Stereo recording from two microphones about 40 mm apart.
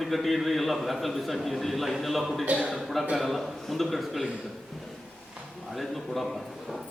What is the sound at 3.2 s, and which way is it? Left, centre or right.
A man's voice, centre.